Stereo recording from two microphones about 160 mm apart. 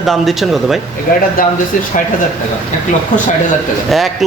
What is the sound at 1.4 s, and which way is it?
Speech, 60° left (ahead or behind).